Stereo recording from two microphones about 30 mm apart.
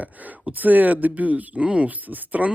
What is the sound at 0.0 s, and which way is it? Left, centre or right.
Speech, right.